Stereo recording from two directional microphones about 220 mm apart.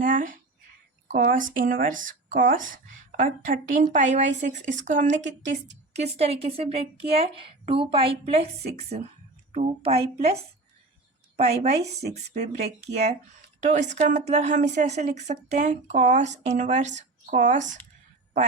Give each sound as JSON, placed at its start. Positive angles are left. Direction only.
{"t": 0.0, "sound": "a woman's voice", "side_deg": -35}
{"t": 11.3, "sound": "a woman's voice", "side_deg": -30}